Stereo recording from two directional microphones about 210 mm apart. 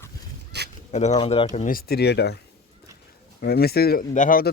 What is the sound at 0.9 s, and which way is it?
Speech, 35° left (ahead or behind).